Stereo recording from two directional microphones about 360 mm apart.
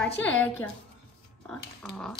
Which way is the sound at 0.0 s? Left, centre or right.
Centre.